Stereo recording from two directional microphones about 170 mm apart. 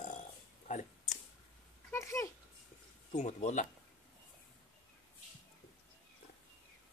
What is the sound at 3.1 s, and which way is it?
Speech, 40° left (ahead or behind).